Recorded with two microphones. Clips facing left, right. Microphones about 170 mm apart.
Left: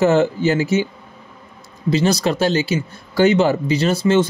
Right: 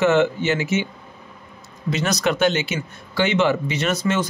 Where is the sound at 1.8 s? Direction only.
30° left (ahead or behind).